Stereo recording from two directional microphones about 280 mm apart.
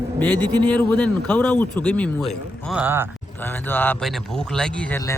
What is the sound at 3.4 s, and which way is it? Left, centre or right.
A man's voice, centre.